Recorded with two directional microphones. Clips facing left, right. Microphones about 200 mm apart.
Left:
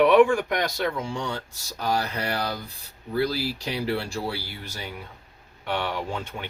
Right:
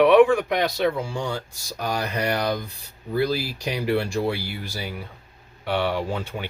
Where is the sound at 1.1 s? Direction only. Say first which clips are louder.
Right 2 dB; 10° right (ahead or behind).